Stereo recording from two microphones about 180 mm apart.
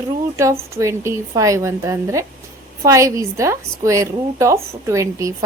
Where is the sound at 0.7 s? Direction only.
15° right (ahead or behind).